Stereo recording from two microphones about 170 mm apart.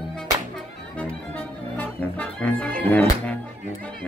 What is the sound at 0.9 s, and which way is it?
Music, 10° left (ahead or behind).